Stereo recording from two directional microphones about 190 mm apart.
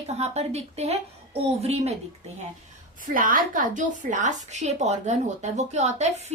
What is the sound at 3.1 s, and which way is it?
A woman's voice, 45° right (ahead or behind).